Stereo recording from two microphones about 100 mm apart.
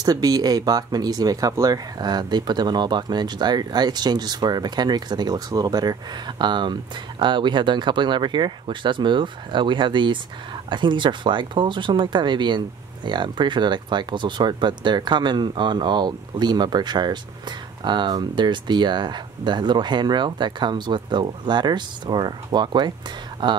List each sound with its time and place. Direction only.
0.0 s speech: 40° right (ahead or behind)